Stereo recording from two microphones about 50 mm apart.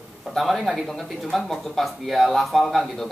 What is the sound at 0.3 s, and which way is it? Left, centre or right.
Speech, centre.